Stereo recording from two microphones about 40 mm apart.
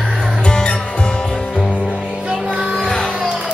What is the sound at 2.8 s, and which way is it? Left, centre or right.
Music, centre.